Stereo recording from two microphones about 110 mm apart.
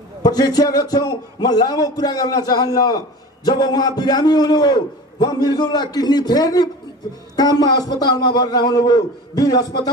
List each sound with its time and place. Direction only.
0.2 s a man's voice: 35° left (ahead or behind)